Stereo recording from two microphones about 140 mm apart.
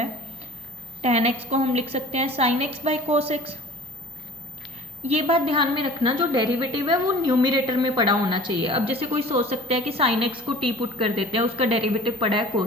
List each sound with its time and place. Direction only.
1.0 s a woman's voice: 50° right (ahead or behind)
5.0 s a woman's voice: 45° right (ahead or behind)